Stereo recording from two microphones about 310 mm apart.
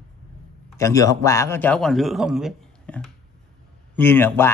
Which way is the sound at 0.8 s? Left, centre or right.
Centre.